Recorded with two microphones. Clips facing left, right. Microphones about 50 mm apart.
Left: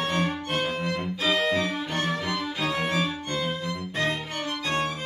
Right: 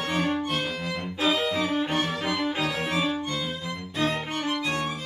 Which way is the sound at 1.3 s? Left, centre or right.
Left.